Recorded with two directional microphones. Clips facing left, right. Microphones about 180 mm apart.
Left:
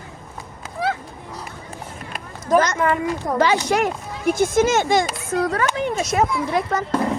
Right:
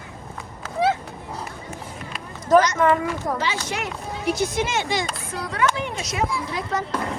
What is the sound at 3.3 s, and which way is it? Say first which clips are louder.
Speech: left 9 dB; 50° left (ahead or behind).